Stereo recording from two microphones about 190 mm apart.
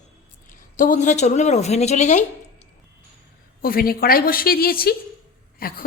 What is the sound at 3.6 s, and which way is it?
A woman's voice, 50° left (ahead or behind).